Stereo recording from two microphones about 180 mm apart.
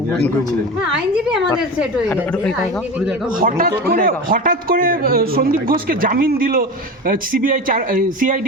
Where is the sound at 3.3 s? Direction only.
50° right (ahead or behind).